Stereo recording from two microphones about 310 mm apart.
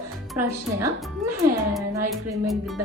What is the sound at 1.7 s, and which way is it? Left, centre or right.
Music, centre.